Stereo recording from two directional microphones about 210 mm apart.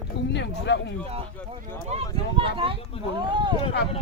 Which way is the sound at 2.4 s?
25° right (ahead or behind).